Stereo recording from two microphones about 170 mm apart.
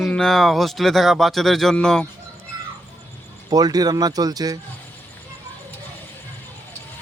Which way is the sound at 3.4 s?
20° right (ahead or behind).